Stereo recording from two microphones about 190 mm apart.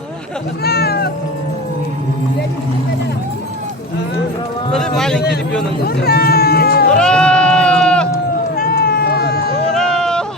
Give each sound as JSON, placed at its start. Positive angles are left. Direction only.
{"t": 0.6, "sound": "speech", "side_deg": 55}
{"t": 4.7, "sound": "a man's voice", "side_deg": 5}
{"t": 6.1, "sound": "speech", "side_deg": 55}
{"t": 6.9, "sound": "bleat", "side_deg": 5}
{"t": 8.5, "sound": "run", "side_deg": 50}
{"t": 9.7, "sound": "a sound", "side_deg": 5}